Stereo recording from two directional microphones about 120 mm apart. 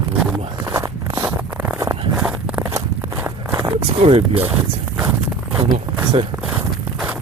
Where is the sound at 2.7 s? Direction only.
25° right (ahead or behind).